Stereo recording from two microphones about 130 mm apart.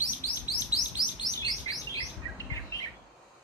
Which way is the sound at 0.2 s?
25° left (ahead or behind).